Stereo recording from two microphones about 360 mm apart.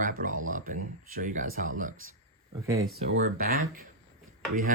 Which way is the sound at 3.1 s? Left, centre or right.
Right.